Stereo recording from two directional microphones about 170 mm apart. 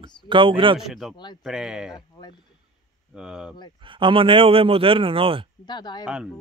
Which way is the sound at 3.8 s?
30° right (ahead or behind).